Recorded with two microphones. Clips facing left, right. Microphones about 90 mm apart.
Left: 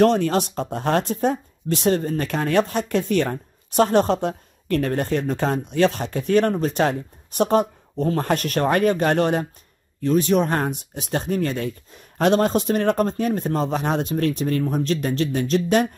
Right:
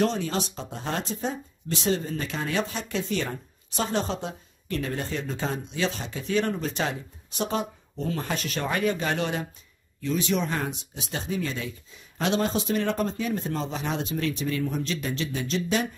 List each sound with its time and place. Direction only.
0.0 s speech: 55° left (ahead or behind)